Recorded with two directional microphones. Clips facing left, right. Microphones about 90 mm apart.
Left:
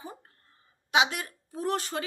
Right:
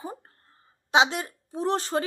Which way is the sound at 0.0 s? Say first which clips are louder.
Right 6 dB; 40° right (ahead or behind).